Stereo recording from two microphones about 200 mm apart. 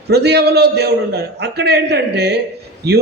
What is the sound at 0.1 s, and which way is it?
A man's voice, 55° right (ahead or behind).